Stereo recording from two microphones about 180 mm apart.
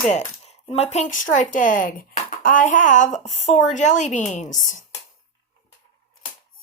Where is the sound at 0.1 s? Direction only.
35° left (ahead or behind).